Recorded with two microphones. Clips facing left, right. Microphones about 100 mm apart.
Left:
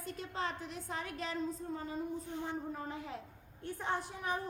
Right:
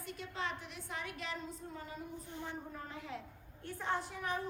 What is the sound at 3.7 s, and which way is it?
Speech, 15° left (ahead or behind).